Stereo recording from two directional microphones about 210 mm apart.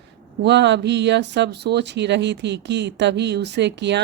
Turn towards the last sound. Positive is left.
turn(degrees=-55)  # may be behind; listen again after turning